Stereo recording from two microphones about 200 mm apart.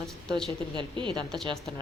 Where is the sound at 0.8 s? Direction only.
25° right (ahead or behind).